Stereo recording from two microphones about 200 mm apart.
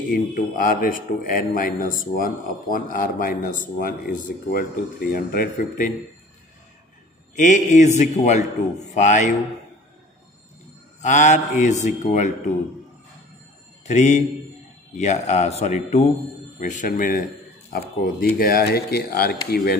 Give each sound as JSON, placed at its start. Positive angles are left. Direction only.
{"t": 0.1, "sound": "a man's voice", "side_deg": 45}
{"t": 7.3, "sound": "speech", "side_deg": 40}
{"t": 11.0, "sound": "speech", "side_deg": 35}
{"t": 13.8, "sound": "a man's voice", "side_deg": 35}